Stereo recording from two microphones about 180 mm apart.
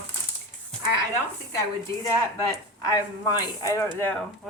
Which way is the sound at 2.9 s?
20° left (ahead or behind).